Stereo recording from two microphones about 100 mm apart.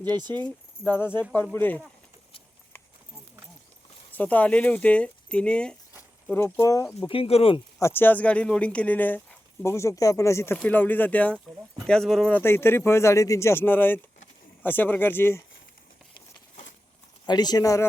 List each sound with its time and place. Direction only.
0.0 s speech: 45° right (ahead or behind)
0.9 s speech: 20° left (ahead or behind)
4.1 s speech: 15° left (ahead or behind)
6.3 s speech: 25° left (ahead or behind)
7.1 s speech: 80° left
7.8 s speech: 25° left (ahead or behind)
9.6 s speech: 30° left (ahead or behind); by 12.3 s 5° left (ahead or behind)
12.3 s speech: 25° left (ahead or behind)
17.2 s speech: 45° left (ahead or behind)